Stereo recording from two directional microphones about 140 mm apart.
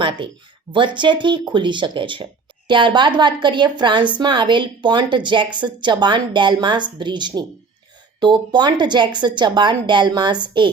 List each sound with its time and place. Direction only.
0.7 s speech: 35° right (ahead or behind)